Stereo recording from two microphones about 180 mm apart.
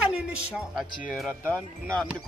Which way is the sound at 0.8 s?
5° right (ahead or behind).